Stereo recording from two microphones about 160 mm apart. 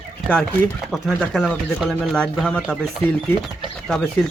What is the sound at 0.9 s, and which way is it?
Speech, 5° left (ahead or behind).